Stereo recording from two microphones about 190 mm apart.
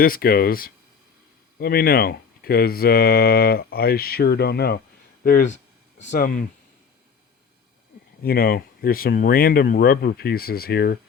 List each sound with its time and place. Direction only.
0.0 s speech: 50° left (ahead or behind)
5.2 s speech: 45° left (ahead or behind)
8.2 s speech: 55° left (ahead or behind)